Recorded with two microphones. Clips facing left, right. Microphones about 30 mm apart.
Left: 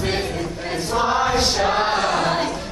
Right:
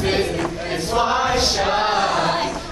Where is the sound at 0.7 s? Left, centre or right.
Centre.